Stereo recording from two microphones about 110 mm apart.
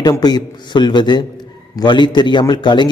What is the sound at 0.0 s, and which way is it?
A man's voice, 40° left (ahead or behind).